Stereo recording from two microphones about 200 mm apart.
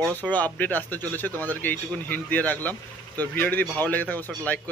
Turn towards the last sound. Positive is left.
turn(degrees=10)  # may be behind; listen again after turning